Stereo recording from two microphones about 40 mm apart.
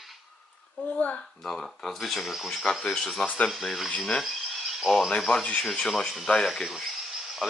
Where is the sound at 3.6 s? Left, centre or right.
Centre.